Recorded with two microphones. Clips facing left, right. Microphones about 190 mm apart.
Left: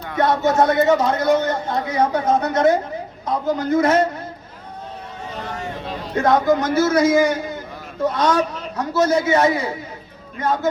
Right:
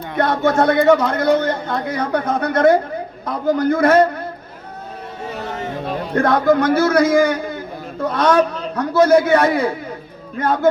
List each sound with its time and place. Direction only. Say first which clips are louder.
0.2 s a man's voice: right 1 dB; 55° right (ahead or behind)
5.8 s a man's voice: right 2 dB; 55° right (ahead or behind)